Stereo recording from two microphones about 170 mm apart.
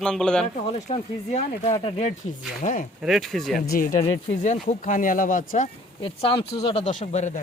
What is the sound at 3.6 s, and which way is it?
Speech, 55° left (ahead or behind).